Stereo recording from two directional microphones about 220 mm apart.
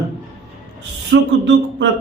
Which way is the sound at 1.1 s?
55° right (ahead or behind).